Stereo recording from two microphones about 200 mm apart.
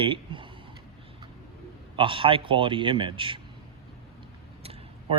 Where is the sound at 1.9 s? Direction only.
25° right (ahead or behind).